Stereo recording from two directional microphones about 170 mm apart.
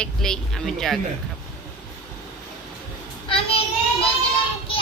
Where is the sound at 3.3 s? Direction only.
35° left (ahead or behind).